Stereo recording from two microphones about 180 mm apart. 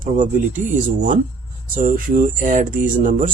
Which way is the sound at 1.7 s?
45° right (ahead or behind).